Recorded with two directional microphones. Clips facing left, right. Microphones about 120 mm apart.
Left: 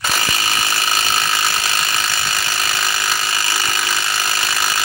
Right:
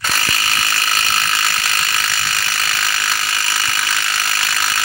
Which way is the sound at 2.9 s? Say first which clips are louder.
Left 1 dB; 15° left (ahead or behind).